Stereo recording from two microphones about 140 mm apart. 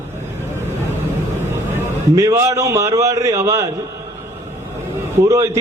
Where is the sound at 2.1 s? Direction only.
20° right (ahead or behind).